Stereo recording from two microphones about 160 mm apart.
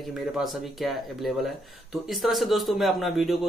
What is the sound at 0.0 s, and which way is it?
Speech, centre (ahead or behind).